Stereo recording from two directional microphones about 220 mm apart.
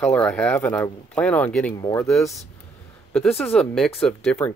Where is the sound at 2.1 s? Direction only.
Centre (ahead or behind).